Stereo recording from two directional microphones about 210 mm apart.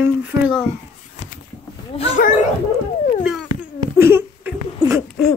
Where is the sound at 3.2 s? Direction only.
Centre (ahead or behind).